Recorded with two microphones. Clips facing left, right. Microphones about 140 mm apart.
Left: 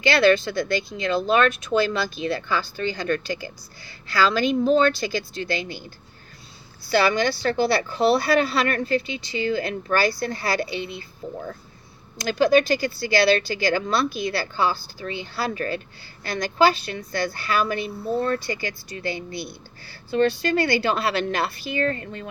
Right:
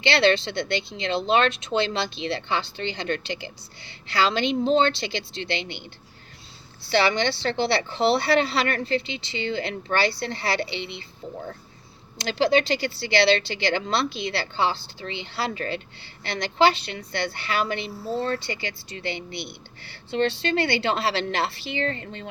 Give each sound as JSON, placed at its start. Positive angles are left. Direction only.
{"t": 0.0, "sound": "speech", "side_deg": -25}
{"t": 6.8, "sound": "speech", "side_deg": -25}
{"t": 12.1, "sound": "speech", "side_deg": -25}